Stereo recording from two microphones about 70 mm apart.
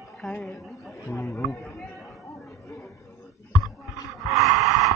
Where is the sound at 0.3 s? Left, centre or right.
Centre.